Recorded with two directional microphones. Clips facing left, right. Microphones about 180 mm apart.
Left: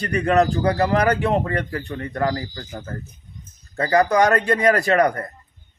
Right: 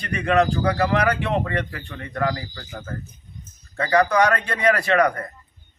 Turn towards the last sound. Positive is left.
turn(degrees=40)  # may be behind; listen again after turning